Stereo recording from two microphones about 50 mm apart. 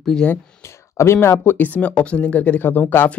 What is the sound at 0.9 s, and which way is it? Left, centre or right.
Speech, left.